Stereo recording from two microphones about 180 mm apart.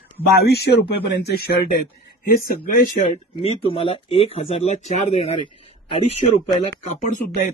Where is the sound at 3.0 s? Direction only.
30° left (ahead or behind).